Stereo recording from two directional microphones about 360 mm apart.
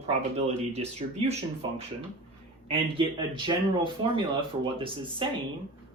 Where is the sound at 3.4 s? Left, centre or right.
Centre.